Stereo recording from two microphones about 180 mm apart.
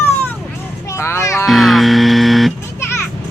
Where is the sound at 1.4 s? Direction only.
Centre (ahead or behind).